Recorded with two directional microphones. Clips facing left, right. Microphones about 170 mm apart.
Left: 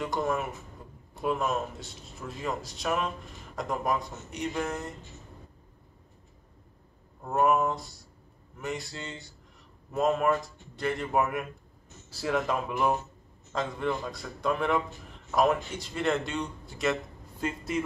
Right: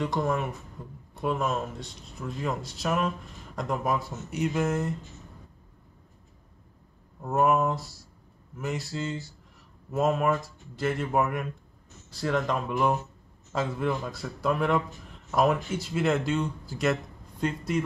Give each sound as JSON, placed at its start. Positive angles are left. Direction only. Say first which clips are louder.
{"t": 0.0, "sound": "speech", "louder": "right 2 dB", "side_deg": 0}
{"t": 7.2, "sound": "speech", "louder": "right 1 dB", "side_deg": -5}